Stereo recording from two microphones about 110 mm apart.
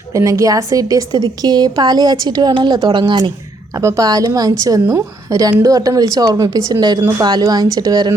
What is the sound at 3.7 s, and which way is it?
Speech, 30° right (ahead or behind).